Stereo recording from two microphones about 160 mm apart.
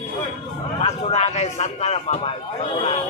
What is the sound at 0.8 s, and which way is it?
A man's voice, 40° left (ahead or behind).